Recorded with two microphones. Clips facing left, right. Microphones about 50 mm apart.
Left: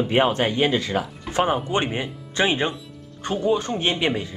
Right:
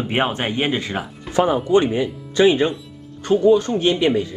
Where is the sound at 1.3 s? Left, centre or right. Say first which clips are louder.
Right 6 dB; left.